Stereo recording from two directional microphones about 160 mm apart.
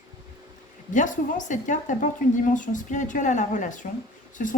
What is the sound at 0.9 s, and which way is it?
Speech, 50° left (ahead or behind).